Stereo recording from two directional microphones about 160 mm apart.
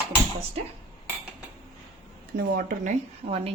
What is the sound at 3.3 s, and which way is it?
Speech, 40° right (ahead or behind).